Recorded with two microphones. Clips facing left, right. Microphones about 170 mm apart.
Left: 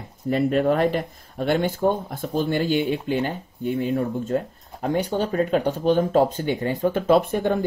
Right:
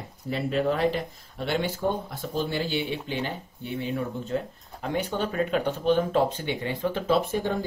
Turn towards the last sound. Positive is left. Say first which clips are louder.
# left 6 dB
turn(degrees=55)  # may be behind; listen again after turning